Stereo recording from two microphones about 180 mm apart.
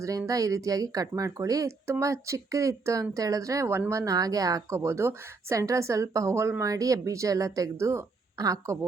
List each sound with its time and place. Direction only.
0.0 s speech: 20° right (ahead or behind)